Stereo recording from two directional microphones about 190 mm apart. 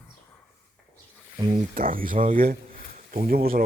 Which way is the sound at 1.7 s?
45° right (ahead or behind).